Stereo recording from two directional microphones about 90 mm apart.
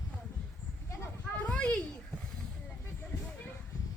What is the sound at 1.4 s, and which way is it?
Children playing, 15° left (ahead or behind).